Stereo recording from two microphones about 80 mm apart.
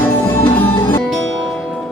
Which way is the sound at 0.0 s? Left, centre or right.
Left.